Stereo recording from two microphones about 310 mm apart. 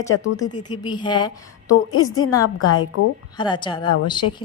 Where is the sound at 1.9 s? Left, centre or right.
Left.